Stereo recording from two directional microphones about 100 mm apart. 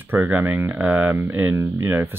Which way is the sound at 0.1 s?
20° right (ahead or behind).